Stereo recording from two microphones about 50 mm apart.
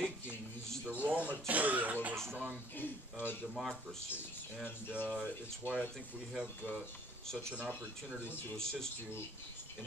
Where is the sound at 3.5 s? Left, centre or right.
Centre.